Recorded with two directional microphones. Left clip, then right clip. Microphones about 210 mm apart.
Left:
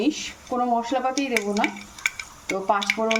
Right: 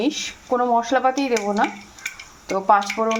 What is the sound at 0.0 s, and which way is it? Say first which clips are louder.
A woman's voice: right 2 dB; 15° right (ahead or behind).